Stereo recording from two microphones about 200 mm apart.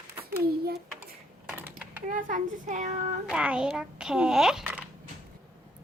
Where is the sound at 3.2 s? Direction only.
5° right (ahead or behind).